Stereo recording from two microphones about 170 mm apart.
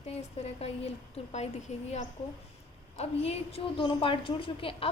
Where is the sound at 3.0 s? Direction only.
35° left (ahead or behind).